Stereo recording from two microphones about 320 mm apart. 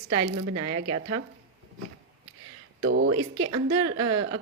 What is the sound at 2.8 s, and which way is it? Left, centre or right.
A woman's voice, right.